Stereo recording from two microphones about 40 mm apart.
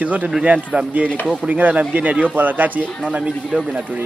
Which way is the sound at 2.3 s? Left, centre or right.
Right.